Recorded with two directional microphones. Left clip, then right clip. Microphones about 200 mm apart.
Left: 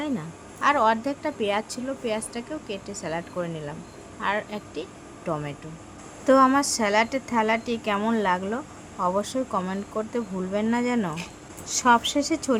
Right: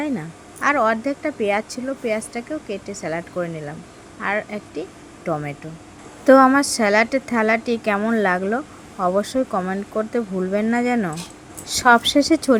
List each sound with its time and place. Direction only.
0.0 s a woman's voice: 15° right (ahead or behind)